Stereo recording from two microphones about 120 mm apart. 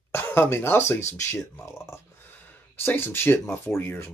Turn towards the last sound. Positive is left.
turn(degrees=20)  # may be behind; listen again after turning